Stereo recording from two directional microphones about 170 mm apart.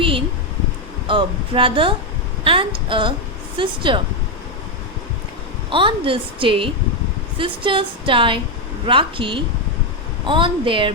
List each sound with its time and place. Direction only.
1.0 s a woman's voice: 30° right (ahead or behind)
5.7 s a woman's voice: 30° right (ahead or behind)